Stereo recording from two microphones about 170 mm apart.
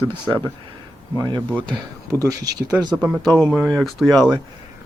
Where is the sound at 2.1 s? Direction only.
20° right (ahead or behind).